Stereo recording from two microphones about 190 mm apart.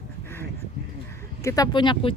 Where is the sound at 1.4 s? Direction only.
15° left (ahead or behind).